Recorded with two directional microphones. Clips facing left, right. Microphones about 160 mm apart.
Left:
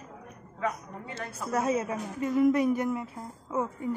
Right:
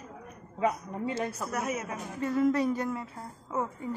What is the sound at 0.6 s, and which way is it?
Speech, 25° right (ahead or behind).